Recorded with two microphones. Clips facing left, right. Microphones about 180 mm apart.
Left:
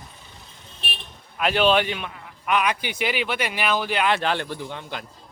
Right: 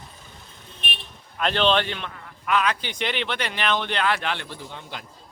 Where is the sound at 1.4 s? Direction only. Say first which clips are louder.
Left 2 dB; 10° left (ahead or behind).